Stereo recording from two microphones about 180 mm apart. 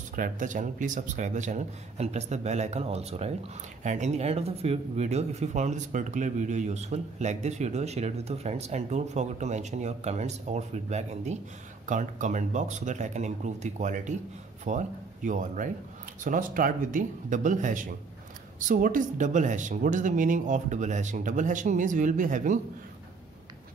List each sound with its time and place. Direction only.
0.1 s speech: 45° right (ahead or behind)